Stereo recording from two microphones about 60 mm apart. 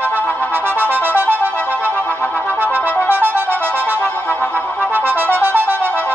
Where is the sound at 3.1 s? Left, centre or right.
Right.